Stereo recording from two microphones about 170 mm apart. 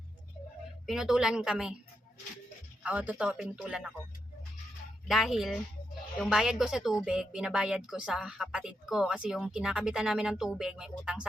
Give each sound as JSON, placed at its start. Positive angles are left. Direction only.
{"t": 0.9, "sound": "a woman's voice", "side_deg": -5}
{"t": 2.8, "sound": "a woman's voice", "side_deg": -10}
{"t": 5.0, "sound": "a woman's voice", "side_deg": 0}